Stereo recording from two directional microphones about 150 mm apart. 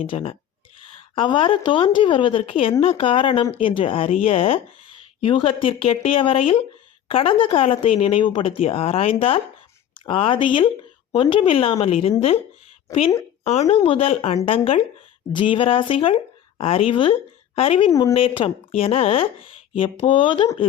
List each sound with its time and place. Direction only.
0.0 s speech: 40° left (ahead or behind)
13.4 s a woman's voice: 45° left (ahead or behind)